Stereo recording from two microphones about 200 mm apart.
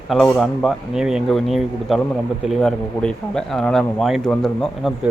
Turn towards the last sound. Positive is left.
turn(degrees=0)  # may be behind; listen again after turning